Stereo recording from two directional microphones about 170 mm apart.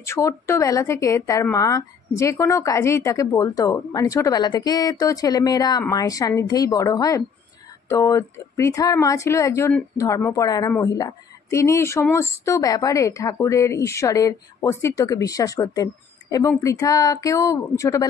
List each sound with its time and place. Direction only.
0.0 s speech: 15° left (ahead or behind)